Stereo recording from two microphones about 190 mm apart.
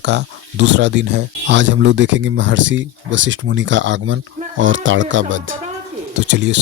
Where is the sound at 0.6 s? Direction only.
65° right (ahead or behind); by 5.4 s 85° right.